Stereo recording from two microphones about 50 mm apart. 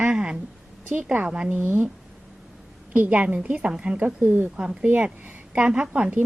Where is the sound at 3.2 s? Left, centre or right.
Right.